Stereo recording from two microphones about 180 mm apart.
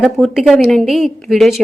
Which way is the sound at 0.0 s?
Centre (ahead or behind).